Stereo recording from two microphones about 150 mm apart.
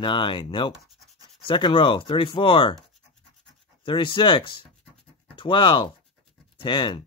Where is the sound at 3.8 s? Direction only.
35° left (ahead or behind).